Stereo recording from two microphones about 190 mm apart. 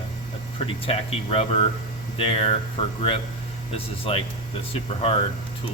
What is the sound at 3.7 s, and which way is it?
Speech, 30° left (ahead or behind).